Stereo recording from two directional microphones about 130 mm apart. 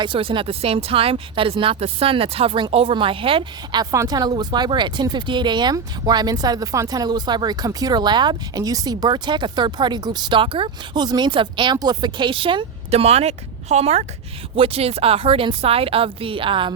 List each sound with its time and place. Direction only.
0.0 s speech: 40° right (ahead or behind)
3.9 s speech: 30° right (ahead or behind)